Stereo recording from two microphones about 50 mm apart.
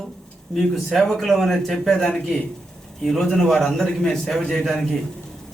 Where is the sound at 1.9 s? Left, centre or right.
Centre.